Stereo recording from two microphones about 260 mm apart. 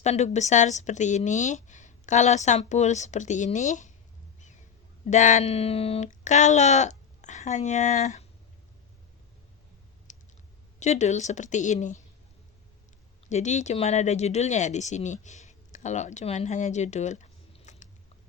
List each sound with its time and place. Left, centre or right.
0.0 s speech: left
5.1 s speech: left
10.1 s clicking: left
10.8 s speech: left
13.2 s speech: left